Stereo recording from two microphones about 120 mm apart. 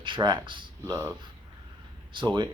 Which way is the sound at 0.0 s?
40° right (ahead or behind).